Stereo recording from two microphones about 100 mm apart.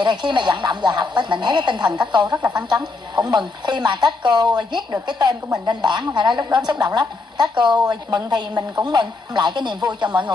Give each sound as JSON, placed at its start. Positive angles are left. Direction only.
{"t": 0.0, "sound": "a woman's voice", "side_deg": -50}